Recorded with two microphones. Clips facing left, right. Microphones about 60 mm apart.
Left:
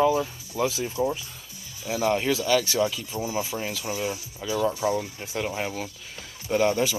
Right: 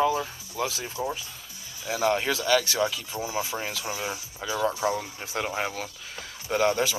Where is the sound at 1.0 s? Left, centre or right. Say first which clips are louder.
Left 5 dB; right.